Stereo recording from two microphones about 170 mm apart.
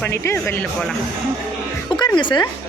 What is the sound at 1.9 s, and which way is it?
Music, 25° left (ahead or behind).